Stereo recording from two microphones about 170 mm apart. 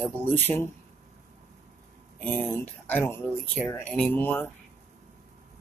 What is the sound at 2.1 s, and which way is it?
Speech, 10° left (ahead or behind).